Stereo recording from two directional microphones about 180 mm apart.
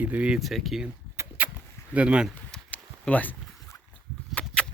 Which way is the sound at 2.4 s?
5° left (ahead or behind).